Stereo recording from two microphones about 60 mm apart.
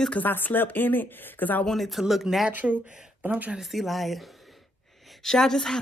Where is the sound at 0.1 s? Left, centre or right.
Left.